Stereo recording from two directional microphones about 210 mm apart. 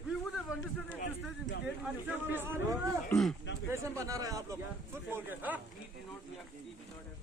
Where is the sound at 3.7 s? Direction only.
15° right (ahead or behind).